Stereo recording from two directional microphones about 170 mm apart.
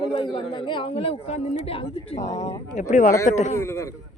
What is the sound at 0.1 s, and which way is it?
A man's voice, 30° left (ahead or behind).